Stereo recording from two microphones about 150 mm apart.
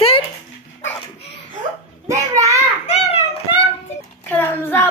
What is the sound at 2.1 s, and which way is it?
Speech, 20° right (ahead or behind).